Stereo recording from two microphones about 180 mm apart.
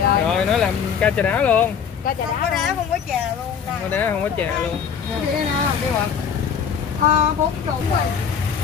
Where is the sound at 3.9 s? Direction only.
10° left (ahead or behind).